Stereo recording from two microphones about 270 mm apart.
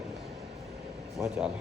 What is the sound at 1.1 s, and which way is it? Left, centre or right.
Speech, centre.